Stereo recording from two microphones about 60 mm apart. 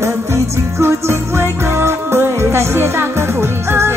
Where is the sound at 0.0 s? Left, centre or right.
Right.